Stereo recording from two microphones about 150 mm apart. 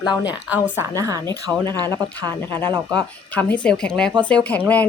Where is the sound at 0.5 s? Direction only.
15° right (ahead or behind).